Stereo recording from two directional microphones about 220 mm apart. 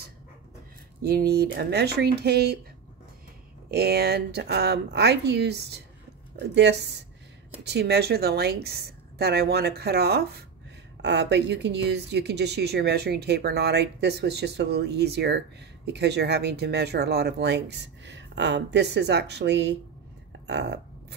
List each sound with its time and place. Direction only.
1.0 s speech: 45° right (ahead or behind)
3.7 s speech: 45° right (ahead or behind)